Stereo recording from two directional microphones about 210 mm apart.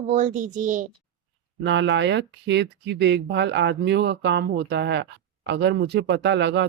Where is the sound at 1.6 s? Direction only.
60° right (ahead or behind).